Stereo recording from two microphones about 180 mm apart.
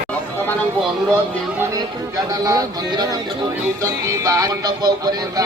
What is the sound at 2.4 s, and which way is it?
Music, 20° right (ahead or behind).